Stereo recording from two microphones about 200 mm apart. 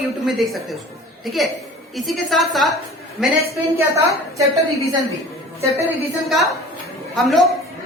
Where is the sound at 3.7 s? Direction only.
15° right (ahead or behind).